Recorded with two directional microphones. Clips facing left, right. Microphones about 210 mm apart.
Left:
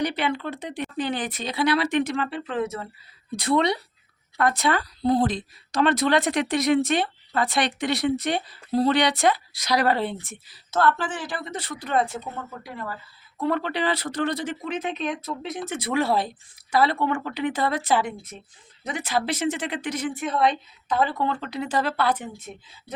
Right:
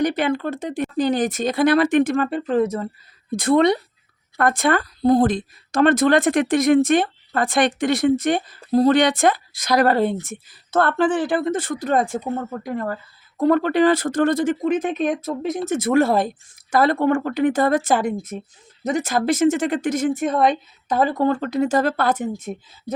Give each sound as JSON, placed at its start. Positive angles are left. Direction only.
{"t": 0.0, "sound": "speech", "side_deg": -45}